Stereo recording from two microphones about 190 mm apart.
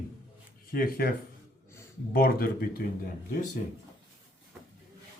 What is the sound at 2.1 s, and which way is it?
Speech, 50° left (ahead or behind).